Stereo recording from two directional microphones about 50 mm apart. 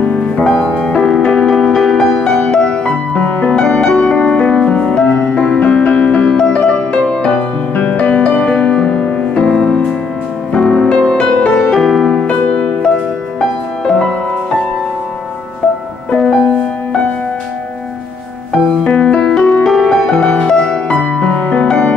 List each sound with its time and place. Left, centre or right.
0.7 s music: centre
8.5 s music: centre
11.7 s music: centre
12.1 s music: centre
16.1 s music: centre
18.7 s music: centre
20.1 s music: left